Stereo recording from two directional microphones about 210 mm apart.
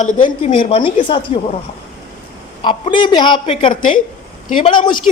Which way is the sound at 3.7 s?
40° left (ahead or behind).